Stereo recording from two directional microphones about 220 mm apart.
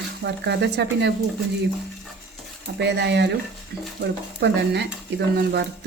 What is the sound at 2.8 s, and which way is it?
Speech, 50° right (ahead or behind).